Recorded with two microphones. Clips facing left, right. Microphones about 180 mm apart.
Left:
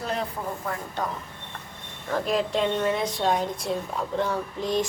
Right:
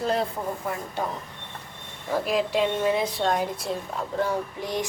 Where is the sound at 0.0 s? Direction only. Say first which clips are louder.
Right 4 dB; 30° right (ahead or behind).